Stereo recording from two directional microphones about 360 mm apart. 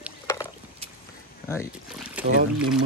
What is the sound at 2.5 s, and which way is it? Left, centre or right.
Speech, centre.